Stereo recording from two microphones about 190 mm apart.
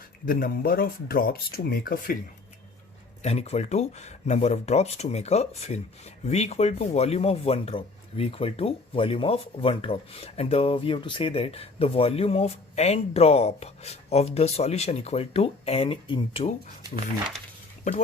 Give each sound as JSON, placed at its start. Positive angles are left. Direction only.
{"t": 0.3, "sound": "speech", "side_deg": 50}
{"t": 3.2, "sound": "speech", "side_deg": 35}